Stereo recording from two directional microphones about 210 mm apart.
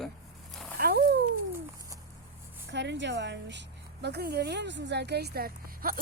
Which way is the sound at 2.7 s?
55° right (ahead or behind).